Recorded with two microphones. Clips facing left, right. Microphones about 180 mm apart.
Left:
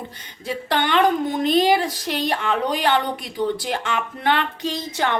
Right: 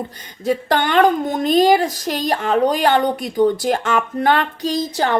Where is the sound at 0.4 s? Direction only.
45° right (ahead or behind).